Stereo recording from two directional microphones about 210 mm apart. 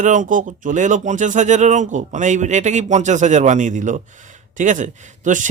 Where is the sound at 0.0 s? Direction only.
35° right (ahead or behind).